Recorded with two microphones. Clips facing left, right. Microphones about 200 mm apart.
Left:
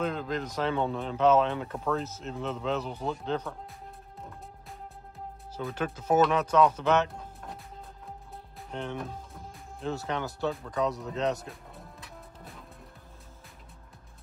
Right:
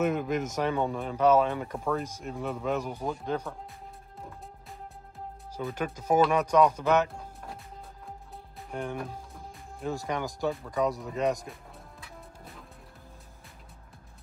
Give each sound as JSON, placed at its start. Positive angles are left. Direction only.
{"t": 0.0, "sound": "speech", "side_deg": -10}
{"t": 5.6, "sound": "speech", "side_deg": -5}
{"t": 8.6, "sound": "speech", "side_deg": -10}
{"t": 12.0, "sound": "music", "side_deg": 0}